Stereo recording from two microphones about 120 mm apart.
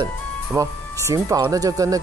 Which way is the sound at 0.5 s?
25° right (ahead or behind).